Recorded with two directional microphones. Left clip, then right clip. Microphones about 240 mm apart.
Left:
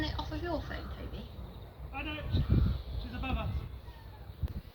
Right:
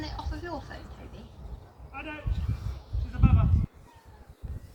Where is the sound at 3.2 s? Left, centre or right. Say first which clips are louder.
Right 6 dB; centre.